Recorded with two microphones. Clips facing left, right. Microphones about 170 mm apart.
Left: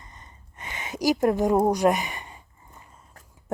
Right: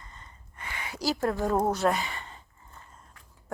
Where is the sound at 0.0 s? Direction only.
20° left (ahead or behind).